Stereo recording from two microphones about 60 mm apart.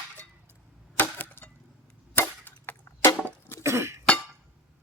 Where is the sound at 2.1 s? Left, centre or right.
Left.